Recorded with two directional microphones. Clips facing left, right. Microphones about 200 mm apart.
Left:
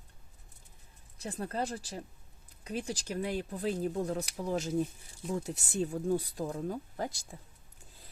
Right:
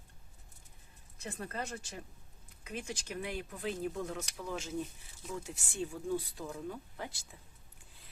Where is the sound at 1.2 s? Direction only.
35° left (ahead or behind).